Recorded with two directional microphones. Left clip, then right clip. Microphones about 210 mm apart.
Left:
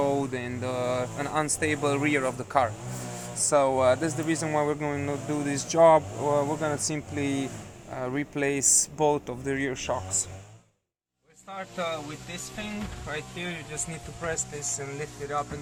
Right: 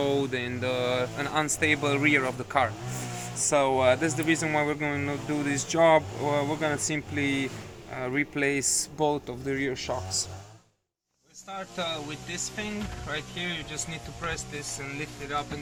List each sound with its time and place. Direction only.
0.0 s speech: 25° left (ahead or behind)
11.5 s speech: 5° left (ahead or behind)
13.1 s speech: centre (ahead or behind)
14.9 s speech: 30° left (ahead or behind)